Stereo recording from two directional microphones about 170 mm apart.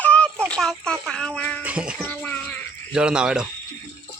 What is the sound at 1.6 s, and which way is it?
Music, 5° right (ahead or behind).